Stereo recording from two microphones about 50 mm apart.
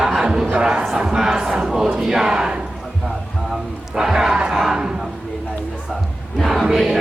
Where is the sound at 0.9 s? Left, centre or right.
Centre.